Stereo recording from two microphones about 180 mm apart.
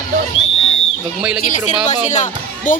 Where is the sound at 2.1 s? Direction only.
45° left (ahead or behind).